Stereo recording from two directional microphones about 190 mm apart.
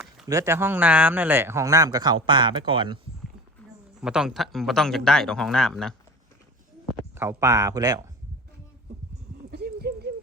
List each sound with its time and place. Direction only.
0.3 s speech: 15° right (ahead or behind)
4.0 s speech: 5° right (ahead or behind)
7.2 s speech: 15° right (ahead or behind)
9.5 s a sound: 55° right (ahead or behind)